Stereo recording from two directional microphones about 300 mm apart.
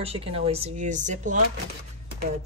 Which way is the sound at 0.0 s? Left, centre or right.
Centre.